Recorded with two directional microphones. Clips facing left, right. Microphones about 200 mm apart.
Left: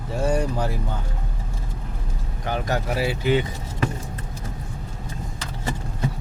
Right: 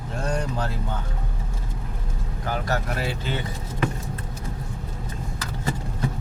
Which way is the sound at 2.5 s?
20° left (ahead or behind).